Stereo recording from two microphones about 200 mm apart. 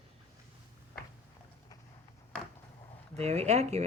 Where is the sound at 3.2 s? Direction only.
35° right (ahead or behind).